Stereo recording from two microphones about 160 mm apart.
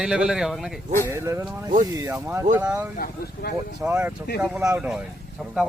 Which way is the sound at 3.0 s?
65° left (ahead or behind).